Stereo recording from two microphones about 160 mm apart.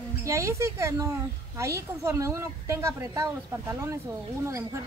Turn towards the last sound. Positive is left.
turn(degrees=-20)  # may be behind; listen again after turning